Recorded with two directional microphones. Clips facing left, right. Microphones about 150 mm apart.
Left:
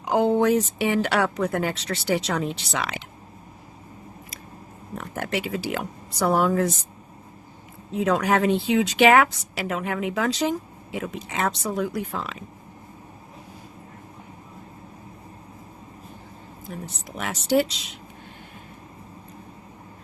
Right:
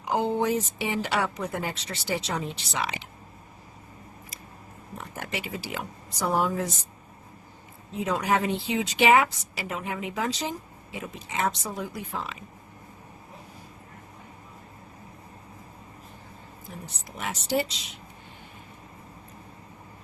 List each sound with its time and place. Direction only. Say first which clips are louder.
0.2 s speech: left 7 dB; 85° left
4.9 s speech: left 7 dB; 70° left (ahead or behind)
8.0 s speech: left 5 dB; 80° left
17.2 s speech: left 6 dB; 90° left